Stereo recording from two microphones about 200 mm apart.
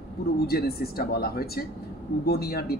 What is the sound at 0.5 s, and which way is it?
Speech, 50° left (ahead or behind).